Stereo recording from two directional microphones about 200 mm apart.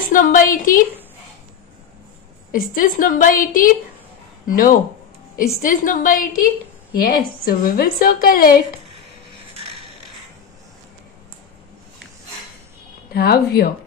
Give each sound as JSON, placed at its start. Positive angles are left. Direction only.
{"t": 0.0, "sound": "a woman's voice", "side_deg": 40}
{"t": 2.5, "sound": "a woman's voice", "side_deg": 45}
{"t": 13.1, "sound": "a woman's voice", "side_deg": 50}